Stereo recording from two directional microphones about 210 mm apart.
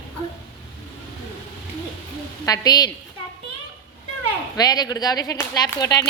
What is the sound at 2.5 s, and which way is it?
Speech, 20° left (ahead or behind).